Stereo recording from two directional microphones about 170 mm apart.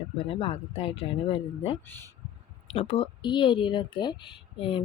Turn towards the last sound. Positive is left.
turn(degrees=30)  # may be behind; listen again after turning